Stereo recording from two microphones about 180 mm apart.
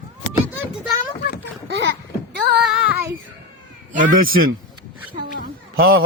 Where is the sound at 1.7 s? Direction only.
75° right (ahead or behind).